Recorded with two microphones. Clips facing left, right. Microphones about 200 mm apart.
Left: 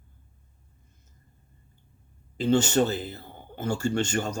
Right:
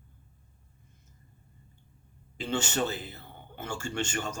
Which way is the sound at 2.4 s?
40° left (ahead or behind).